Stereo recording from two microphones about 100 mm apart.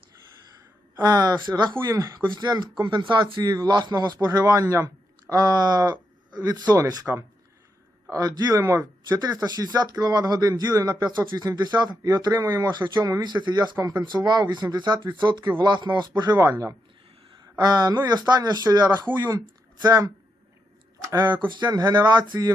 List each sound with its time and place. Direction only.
1.0 s a man's voice: 40° right (ahead or behind)
1.8 s speech: 30° right (ahead or behind)
2.3 s a man's voice: 45° right (ahead or behind)
7.0 s speech: 15° right (ahead or behind)
8.1 s a man's voice: 35° right (ahead or behind)
8.8 s a man's voice: 40° right (ahead or behind)
13.2 s speech: 45° right (ahead or behind)
16.4 s speech: 30° right (ahead or behind)
17.6 s speech: 45° right (ahead or behind)
19.8 s a man's voice: 35° right (ahead or behind)
21.5 s speech: 45° right (ahead or behind)